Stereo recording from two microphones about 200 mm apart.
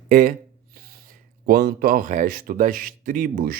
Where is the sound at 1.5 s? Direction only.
45° right (ahead or behind).